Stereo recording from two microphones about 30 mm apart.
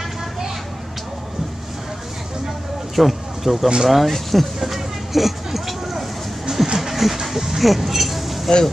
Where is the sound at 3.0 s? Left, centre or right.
Centre.